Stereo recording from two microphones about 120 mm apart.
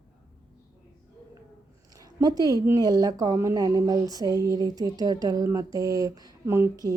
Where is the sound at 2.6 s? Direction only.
30° right (ahead or behind).